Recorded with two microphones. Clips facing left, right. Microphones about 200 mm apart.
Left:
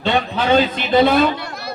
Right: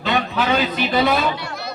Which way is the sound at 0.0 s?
30° left (ahead or behind).